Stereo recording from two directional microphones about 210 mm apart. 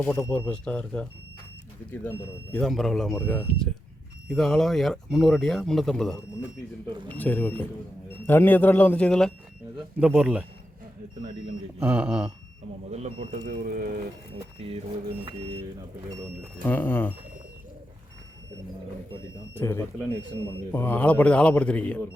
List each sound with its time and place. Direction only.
0.0 s a man's voice: 10° left (ahead or behind)
7.2 s a man's voice: 10° left (ahead or behind)
11.8 s speech: 5° right (ahead or behind)
12.9 s speech: 30° right (ahead or behind)
14.7 s vehicle: 25° right (ahead or behind)
16.6 s a man's voice: 10° left (ahead or behind)
19.5 s a man's voice: 10° left (ahead or behind)